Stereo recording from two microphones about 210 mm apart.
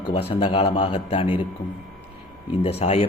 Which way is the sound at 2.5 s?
30° left (ahead or behind).